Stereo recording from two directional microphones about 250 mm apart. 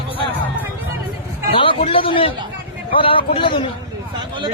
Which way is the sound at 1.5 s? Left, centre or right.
Left.